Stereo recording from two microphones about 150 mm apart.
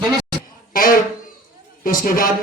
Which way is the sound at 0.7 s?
75° left (ahead or behind).